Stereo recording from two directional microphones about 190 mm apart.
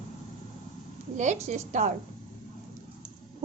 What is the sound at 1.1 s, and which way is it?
Speech, 40° right (ahead or behind).